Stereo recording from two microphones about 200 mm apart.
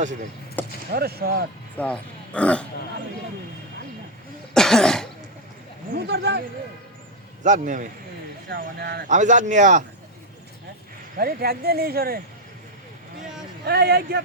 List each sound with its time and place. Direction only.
0.6 s a sound: 10° left (ahead or behind)
0.9 s speech: 50° right (ahead or behind)
1.8 s speech: 5° left (ahead or behind)
4.5 s cough: centre (ahead or behind)
5.9 s a sound: 55° right (ahead or behind)
7.4 s speech: 40° right (ahead or behind)
9.0 s speech: 35° right (ahead or behind)
11.2 s speech: 50° right (ahead or behind)
13.7 s speech: 55° right (ahead or behind)